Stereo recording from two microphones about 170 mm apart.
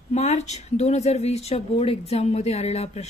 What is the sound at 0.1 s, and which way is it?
Speech, 40° left (ahead or behind).